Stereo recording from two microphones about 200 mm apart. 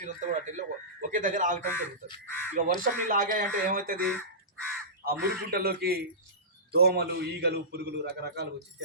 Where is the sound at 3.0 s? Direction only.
40° right (ahead or behind).